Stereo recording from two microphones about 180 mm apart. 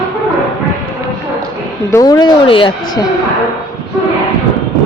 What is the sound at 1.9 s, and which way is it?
Speech, 20° left (ahead or behind).